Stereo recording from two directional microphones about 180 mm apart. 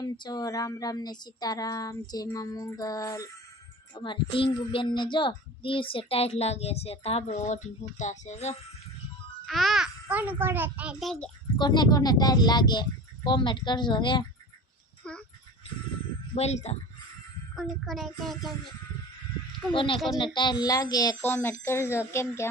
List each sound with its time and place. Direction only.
0.0 s speech: 20° left (ahead or behind); by 8.5 s 40° left (ahead or behind)
9.5 s a sound: centre (ahead or behind)
10.4 s a child's voice: 10° right (ahead or behind)
11.5 s speech: 25° left (ahead or behind)
15.1 s a child's voice: 5° left (ahead or behind)
16.3 s speech: 35° left (ahead or behind)
17.5 s a child's voice: centre (ahead or behind)
19.7 s speech: 30° left (ahead or behind)